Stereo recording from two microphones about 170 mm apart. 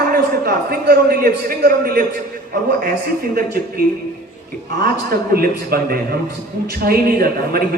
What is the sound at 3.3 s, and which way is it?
Speech, 65° right (ahead or behind).